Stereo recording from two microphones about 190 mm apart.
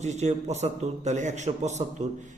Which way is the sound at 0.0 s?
35° right (ahead or behind).